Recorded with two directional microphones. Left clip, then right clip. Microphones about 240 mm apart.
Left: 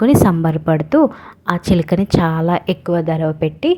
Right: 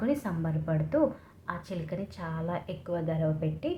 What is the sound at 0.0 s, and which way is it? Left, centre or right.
A woman's voice, left.